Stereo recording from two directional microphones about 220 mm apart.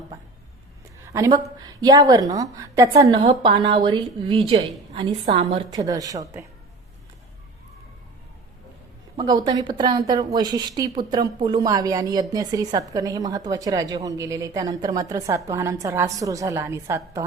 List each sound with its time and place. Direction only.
1.0 s a woman's voice: 15° right (ahead or behind)
9.1 s a woman's voice: 20° right (ahead or behind)